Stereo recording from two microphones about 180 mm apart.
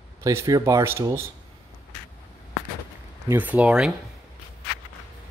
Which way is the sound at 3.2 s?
10° right (ahead or behind).